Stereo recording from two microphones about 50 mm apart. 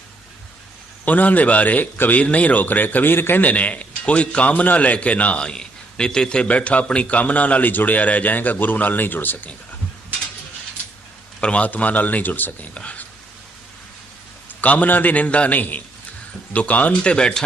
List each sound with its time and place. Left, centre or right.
1.0 s a man's voice: left
2.2 s a man's voice: left
3.4 s a man's voice: left
11.3 s a man's voice: left
12.7 s a man's voice: left
14.6 s a man's voice: left